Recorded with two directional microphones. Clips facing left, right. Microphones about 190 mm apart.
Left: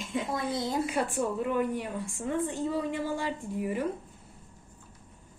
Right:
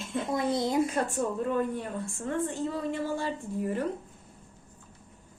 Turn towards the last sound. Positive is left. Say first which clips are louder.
# even
turn(degrees=10)  # may be behind; listen again after turning